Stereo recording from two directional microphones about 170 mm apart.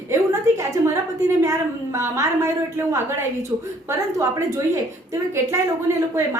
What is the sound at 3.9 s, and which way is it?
Speech, 15° right (ahead or behind).